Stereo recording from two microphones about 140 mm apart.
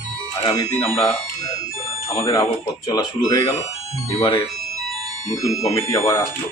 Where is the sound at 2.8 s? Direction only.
30° left (ahead or behind).